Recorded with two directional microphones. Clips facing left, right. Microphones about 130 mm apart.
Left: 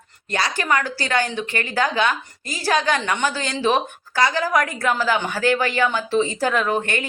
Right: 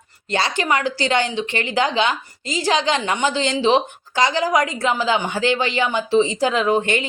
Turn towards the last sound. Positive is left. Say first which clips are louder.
# right 3 dB
turn(degrees=-20)  # may be behind; listen again after turning